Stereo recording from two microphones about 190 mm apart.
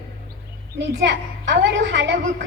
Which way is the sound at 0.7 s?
70° right (ahead or behind).